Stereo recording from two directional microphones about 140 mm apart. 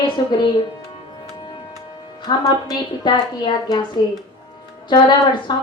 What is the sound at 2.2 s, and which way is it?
Speech, 30° left (ahead or behind).